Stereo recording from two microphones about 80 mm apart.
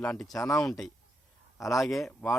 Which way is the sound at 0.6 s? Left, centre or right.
Centre.